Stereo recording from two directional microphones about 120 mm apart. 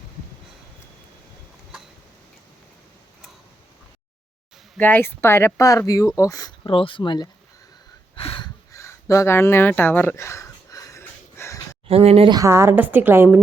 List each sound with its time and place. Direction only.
4.8 s speech: 15° left (ahead or behind)
6.7 s speech: 45° left (ahead or behind)
8.1 s a sound: 50° left (ahead or behind)
8.7 s a sound: 25° left (ahead or behind)
11.9 s speech: 55° right (ahead or behind)
12.3 s a woman's voice: 25° right (ahead or behind)